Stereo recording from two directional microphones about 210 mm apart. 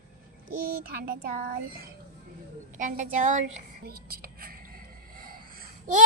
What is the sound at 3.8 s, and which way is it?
Whispering, 45° right (ahead or behind).